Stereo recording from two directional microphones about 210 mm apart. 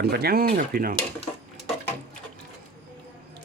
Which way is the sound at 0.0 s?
50° right (ahead or behind).